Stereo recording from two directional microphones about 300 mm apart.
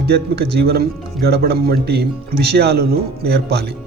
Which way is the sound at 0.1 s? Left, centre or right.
Right.